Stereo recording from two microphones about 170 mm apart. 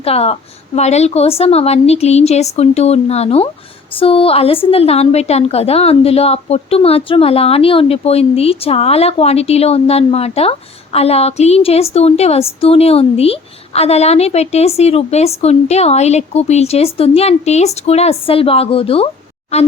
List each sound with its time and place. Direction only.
0.0 s a woman's voice: 35° left (ahead or behind)